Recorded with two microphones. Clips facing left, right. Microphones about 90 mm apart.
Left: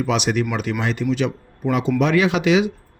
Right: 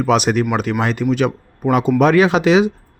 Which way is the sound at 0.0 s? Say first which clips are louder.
Right 5 dB; 45° right (ahead or behind).